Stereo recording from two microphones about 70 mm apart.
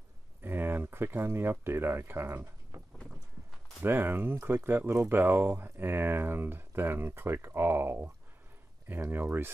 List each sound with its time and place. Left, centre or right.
0.4 s speech: right
3.8 s speech: right
9.1 s speech: right